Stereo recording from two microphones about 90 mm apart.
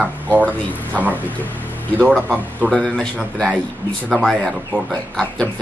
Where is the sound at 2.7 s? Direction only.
15° left (ahead or behind).